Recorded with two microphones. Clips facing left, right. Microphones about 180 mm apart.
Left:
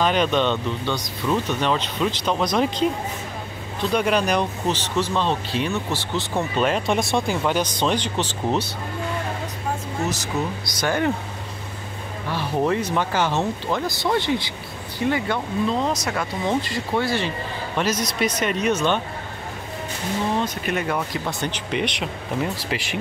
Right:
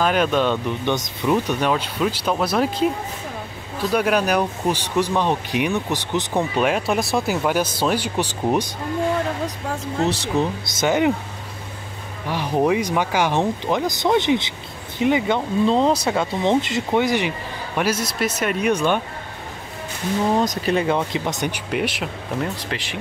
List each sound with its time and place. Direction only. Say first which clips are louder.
0.0 s speech: right 1 dB; 5° right (ahead or behind)
3.9 s speech: right 2 dB; 5° right (ahead or behind)
10.6 s speech: right 2 dB; 25° right (ahead or behind)
12.3 s speech: right 3 dB; 15° right (ahead or behind)
15.7 s speech: right 5 dB; 30° right (ahead or behind); by 18.9 s 10° right (ahead or behind)
20.3 s speech: right 4 dB; 35° right (ahead or behind)
20.8 s speech: right 4 dB; 20° right (ahead or behind); by 22.1 s 5° right (ahead or behind)
22.4 s speech: left 1 dB; 5° left (ahead or behind)